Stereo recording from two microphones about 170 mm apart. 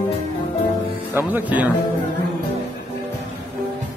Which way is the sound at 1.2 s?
10° right (ahead or behind).